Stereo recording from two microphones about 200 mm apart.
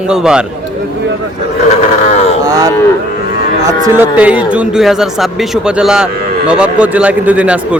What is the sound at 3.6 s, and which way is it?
A man's voice, 15° right (ahead or behind).